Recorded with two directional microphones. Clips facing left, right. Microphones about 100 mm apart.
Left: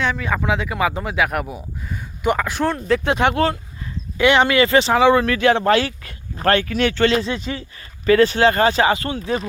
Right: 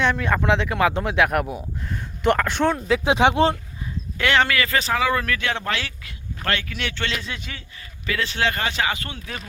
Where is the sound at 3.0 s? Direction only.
15° right (ahead or behind).